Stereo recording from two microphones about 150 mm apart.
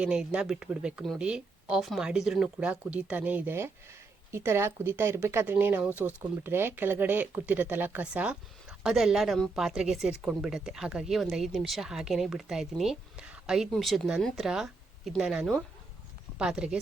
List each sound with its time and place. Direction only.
0.0 s speech: 5° right (ahead or behind)